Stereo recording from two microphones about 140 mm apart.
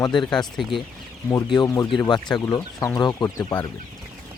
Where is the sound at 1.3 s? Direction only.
25° left (ahead or behind).